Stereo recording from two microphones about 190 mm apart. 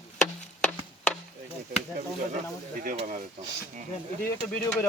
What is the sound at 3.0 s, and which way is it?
Speech, 40° right (ahead or behind).